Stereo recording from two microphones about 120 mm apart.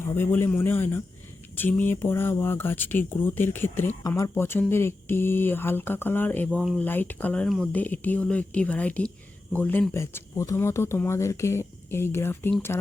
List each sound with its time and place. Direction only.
0.2 s speech: 20° left (ahead or behind)